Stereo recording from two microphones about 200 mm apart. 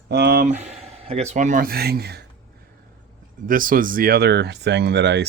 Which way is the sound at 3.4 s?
45° right (ahead or behind).